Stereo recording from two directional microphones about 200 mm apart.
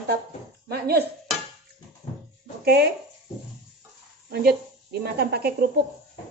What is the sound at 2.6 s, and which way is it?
Speech, 50° right (ahead or behind).